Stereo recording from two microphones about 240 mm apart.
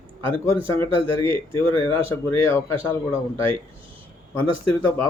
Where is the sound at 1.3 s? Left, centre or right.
Centre.